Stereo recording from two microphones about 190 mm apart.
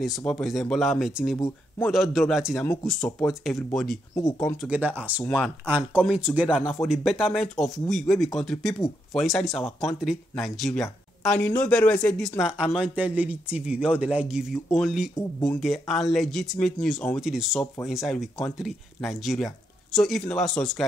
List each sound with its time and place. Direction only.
0.0 s speech: centre (ahead or behind)
4.1 s speech: 20° left (ahead or behind)
4.4 s speech: centre (ahead or behind)
5.2 s speech: 5° left (ahead or behind)
5.7 s speech: 10° right (ahead or behind)